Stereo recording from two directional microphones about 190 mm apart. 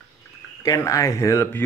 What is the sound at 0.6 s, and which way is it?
Speech, 15° left (ahead or behind).